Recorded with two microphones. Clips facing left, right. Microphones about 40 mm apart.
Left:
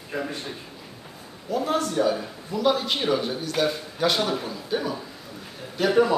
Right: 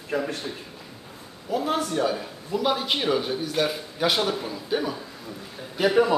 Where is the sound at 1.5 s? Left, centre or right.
Centre.